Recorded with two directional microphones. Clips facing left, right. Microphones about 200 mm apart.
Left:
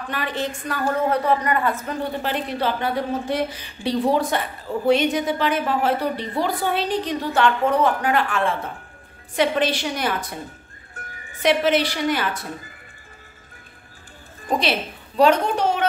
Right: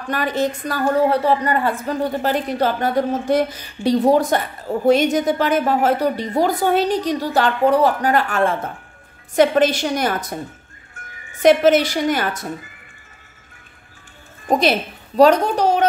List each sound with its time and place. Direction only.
0.1 s a woman's voice: 45° right (ahead or behind)
11.0 s music: 35° left (ahead or behind)
11.4 s a woman's voice: 45° right (ahead or behind)
14.6 s a woman's voice: 40° right (ahead or behind)